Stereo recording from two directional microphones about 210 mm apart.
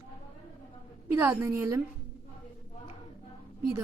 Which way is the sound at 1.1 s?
10° right (ahead or behind).